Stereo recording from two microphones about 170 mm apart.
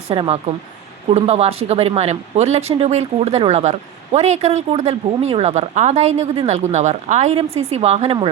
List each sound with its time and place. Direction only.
0.1 s speech: 35° right (ahead or behind)